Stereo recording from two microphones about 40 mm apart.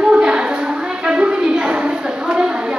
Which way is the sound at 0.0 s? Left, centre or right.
Right.